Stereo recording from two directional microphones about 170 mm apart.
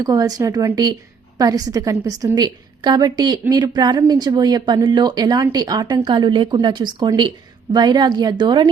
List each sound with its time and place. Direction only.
0.0 s a woman's voice: 20° right (ahead or behind)